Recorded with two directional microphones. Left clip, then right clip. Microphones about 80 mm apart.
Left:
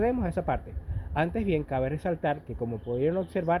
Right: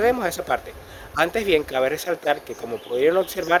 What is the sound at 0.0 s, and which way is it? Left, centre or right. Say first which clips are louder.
Speech: right 7 dB; right.